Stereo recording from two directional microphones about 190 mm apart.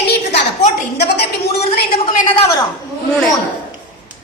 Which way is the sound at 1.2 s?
30° left (ahead or behind).